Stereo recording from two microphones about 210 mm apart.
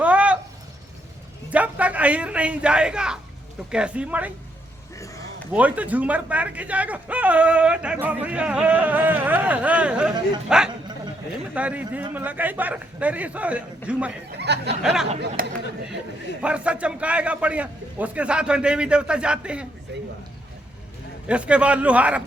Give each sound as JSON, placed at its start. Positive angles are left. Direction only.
{"t": 0.0, "sound": "a sound", "side_deg": -5}
{"t": 1.5, "sound": "a man's voice", "side_deg": -5}
{"t": 5.5, "sound": "a man's voice", "side_deg": -5}
{"t": 14.3, "sound": "speech", "side_deg": -55}
{"t": 15.4, "sound": "speech", "side_deg": -45}
{"t": 16.4, "sound": "a man's voice", "side_deg": -5}
{"t": 21.2, "sound": "a man's voice", "side_deg": -5}